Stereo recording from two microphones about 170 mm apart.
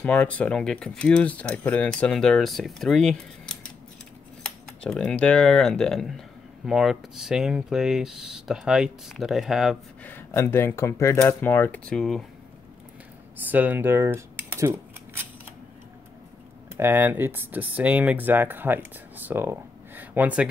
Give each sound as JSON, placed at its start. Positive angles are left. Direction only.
{"t": 0.0, "sound": "speech", "side_deg": 10}
{"t": 10.0, "sound": "speech", "side_deg": 15}
{"t": 13.5, "sound": "speech", "side_deg": -10}
{"t": 16.7, "sound": "speech", "side_deg": -15}